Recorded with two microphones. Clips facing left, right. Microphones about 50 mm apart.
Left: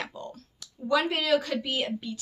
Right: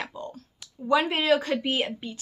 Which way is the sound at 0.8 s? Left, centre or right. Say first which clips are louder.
Right 3 dB; right.